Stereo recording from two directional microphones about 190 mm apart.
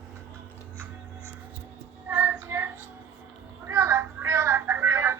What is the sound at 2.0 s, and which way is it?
Child singing, 10° right (ahead or behind).